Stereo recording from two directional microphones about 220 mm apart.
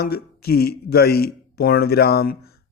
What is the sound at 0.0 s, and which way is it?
Speech, 45° left (ahead or behind).